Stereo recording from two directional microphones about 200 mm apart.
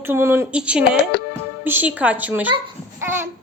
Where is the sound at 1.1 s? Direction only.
55° left (ahead or behind).